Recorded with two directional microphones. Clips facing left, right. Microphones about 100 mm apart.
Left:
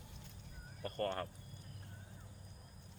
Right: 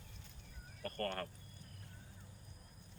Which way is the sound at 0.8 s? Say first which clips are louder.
Left 2 dB; 15° left (ahead or behind).